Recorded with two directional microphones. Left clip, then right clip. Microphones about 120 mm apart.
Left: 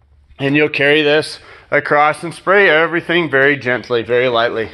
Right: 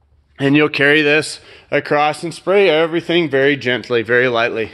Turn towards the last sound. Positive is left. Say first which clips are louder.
# left 1 dB
turn(degrees=-50)  # may be behind; listen again after turning